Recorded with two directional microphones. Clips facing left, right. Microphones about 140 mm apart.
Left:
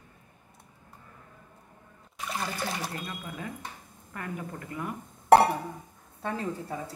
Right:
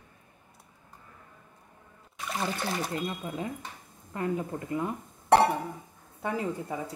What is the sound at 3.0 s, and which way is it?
Speech, 25° right (ahead or behind).